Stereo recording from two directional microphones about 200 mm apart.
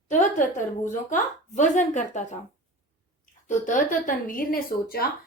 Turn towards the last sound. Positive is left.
turn(degrees=50)  # may be behind; listen again after turning